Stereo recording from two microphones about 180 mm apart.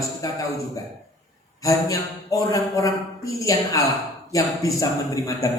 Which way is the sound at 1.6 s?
20° left (ahead or behind).